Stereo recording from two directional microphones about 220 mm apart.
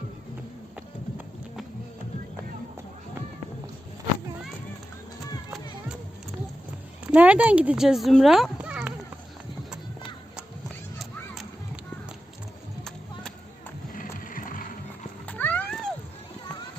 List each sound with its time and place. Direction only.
7.0 s speech: 5° right (ahead or behind)
13.9 s music: 40° left (ahead or behind)
15.3 s a sound: 10° left (ahead or behind)